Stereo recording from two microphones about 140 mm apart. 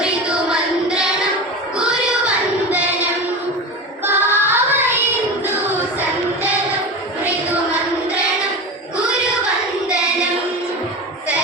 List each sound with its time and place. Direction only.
0.0 s child singing: 5° right (ahead or behind)
2.2 s a sound: 10° right (ahead or behind)
4.0 s child singing: 15° right (ahead or behind)